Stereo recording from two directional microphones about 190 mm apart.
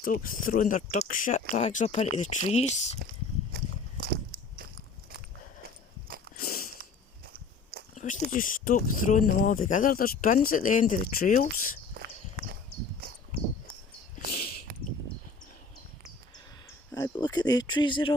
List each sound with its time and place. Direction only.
0.0 s speech: 45° left (ahead or behind)
4.0 s biting: 50° right (ahead or behind)
6.3 s biting: 50° left (ahead or behind)
7.9 s speech: 40° left (ahead or behind)
12.0 s walk: 50° right (ahead or behind)
12.4 s horse: 50° right (ahead or behind)
14.3 s a sound: 50° left (ahead or behind)
16.9 s a sound: 20° left (ahead or behind)